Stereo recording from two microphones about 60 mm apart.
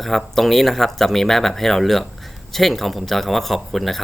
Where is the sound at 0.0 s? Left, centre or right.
Centre.